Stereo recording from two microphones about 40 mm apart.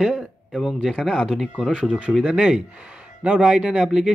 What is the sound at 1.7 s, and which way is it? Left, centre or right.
Speech, right.